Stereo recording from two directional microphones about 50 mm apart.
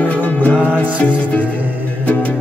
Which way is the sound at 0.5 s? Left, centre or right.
Right.